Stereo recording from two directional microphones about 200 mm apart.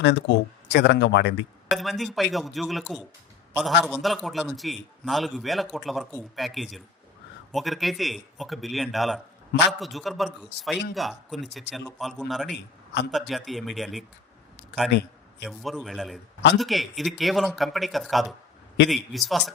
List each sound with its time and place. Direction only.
0.0 s speech: 60° left (ahead or behind)
1.7 s a man's voice: centre (ahead or behind)
12.5 s a man's voice: 60° left (ahead or behind)
13.1 s a man's voice: centre (ahead or behind)
15.4 s a man's voice: centre (ahead or behind)